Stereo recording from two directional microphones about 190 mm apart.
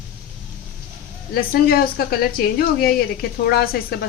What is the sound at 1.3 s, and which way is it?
Speech, 50° left (ahead or behind).